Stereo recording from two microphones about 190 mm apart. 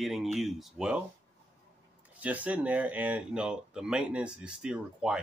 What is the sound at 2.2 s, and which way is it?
Speech, 10° right (ahead or behind).